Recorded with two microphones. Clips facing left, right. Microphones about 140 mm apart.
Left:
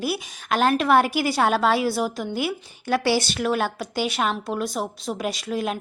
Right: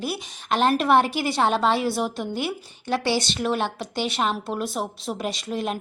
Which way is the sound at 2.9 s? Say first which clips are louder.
Left 2 dB; 20° right (ahead or behind).